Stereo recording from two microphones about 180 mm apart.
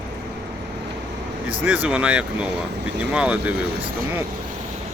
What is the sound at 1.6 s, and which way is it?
Speech, 10° right (ahead or behind).